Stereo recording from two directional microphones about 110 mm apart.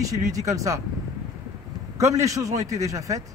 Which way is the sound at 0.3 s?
30° right (ahead or behind).